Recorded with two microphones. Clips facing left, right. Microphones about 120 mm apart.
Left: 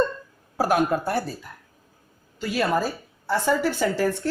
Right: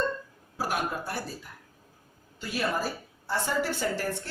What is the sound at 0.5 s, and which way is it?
Speech, 60° left (ahead or behind).